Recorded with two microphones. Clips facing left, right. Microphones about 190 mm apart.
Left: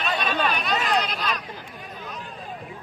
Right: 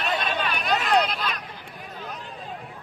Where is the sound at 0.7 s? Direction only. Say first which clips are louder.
Right 2 dB; 60° right (ahead or behind).